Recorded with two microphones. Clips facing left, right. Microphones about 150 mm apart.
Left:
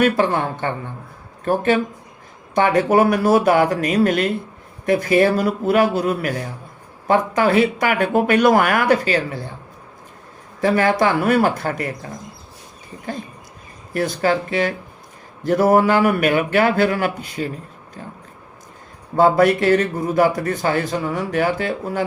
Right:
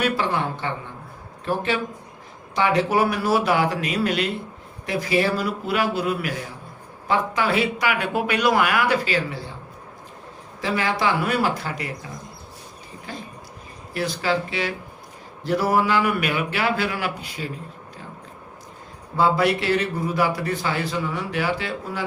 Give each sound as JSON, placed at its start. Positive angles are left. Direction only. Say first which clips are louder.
{"t": 0.0, "sound": "a man's voice", "louder": "left 6 dB", "side_deg": 50}
{"t": 10.6, "sound": "a man's voice", "louder": "left 7 dB", "side_deg": 50}
{"t": 13.1, "sound": "a man's voice", "louder": "left 7 dB", "side_deg": 50}
{"t": 19.1, "sound": "a man's voice", "louder": "left 6 dB", "side_deg": 45}